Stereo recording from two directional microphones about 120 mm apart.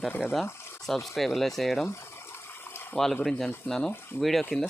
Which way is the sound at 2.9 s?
5° left (ahead or behind).